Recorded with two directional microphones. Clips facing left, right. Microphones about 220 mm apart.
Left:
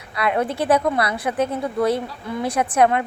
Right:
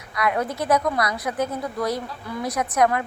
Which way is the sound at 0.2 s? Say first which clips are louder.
Left 3 dB; 30° left (ahead or behind).